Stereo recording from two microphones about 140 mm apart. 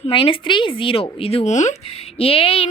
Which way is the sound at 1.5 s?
55° left (ahead or behind).